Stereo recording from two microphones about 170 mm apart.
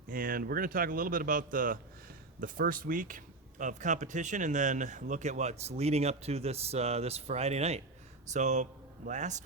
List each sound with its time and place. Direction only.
0.1 s a man's voice: 55° right (ahead or behind)